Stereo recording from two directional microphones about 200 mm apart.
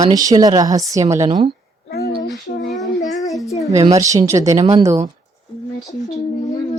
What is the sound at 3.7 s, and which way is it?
Speech, 15° right (ahead or behind).